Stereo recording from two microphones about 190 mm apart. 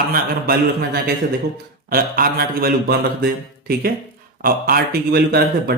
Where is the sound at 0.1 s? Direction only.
55° right (ahead or behind).